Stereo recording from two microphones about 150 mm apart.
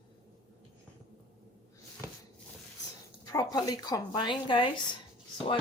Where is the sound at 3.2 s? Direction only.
25° left (ahead or behind).